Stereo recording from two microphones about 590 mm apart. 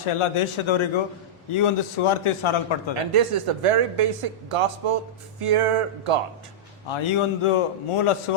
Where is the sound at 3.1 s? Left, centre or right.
Right.